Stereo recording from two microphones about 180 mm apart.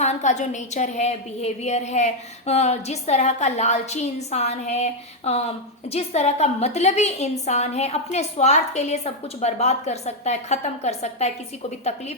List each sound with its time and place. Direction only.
0.0 s a woman's voice: 40° left (ahead or behind)